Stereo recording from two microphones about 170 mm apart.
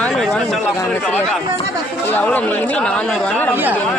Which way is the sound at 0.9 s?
5° left (ahead or behind).